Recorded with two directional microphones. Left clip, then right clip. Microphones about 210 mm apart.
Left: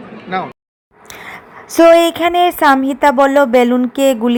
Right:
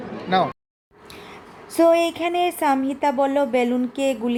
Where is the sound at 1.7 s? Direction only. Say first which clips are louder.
Left 9 dB; 20° left (ahead or behind).